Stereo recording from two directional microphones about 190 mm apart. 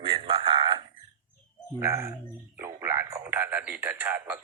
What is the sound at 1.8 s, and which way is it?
A man's voice, 15° right (ahead or behind).